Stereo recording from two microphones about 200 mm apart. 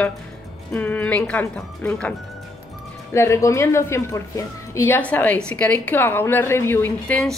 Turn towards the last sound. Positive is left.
turn(degrees=5)  # may be behind; listen again after turning